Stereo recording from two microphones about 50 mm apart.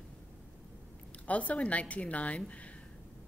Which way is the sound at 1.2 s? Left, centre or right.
Left.